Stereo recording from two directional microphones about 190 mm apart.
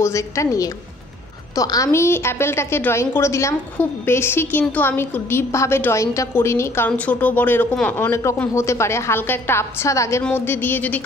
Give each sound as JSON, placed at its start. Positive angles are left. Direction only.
{"t": 0.0, "sound": "a woman's voice", "side_deg": 15}